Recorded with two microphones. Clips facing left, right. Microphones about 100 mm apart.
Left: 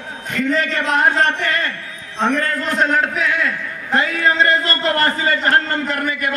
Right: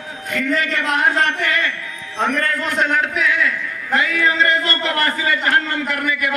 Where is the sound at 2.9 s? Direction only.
35° left (ahead or behind).